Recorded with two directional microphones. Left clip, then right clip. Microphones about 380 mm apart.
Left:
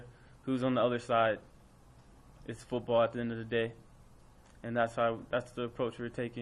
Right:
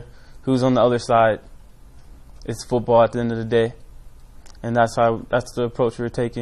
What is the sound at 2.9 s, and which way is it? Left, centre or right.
Speech, right.